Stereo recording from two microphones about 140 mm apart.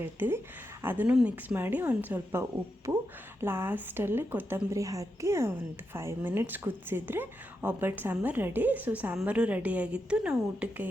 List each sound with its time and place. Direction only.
0.0 s a woman's voice: 15° right (ahead or behind)